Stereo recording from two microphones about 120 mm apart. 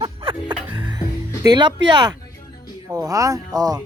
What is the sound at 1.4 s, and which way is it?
Speech, 35° right (ahead or behind).